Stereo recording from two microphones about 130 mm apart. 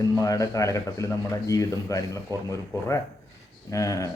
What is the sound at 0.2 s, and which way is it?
A man's voice, 25° left (ahead or behind).